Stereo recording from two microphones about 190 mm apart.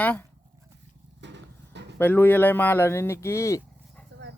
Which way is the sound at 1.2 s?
65° right (ahead or behind).